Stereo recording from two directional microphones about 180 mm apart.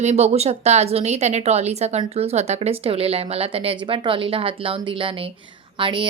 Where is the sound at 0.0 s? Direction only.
40° right (ahead or behind).